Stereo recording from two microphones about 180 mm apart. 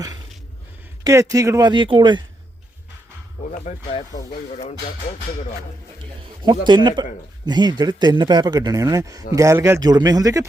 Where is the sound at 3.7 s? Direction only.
45° left (ahead or behind).